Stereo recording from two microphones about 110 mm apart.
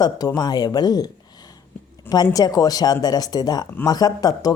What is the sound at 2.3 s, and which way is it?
Speech, 35° left (ahead or behind).